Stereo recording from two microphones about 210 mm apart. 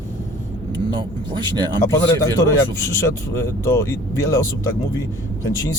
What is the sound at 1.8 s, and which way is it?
Speech, 15° left (ahead or behind).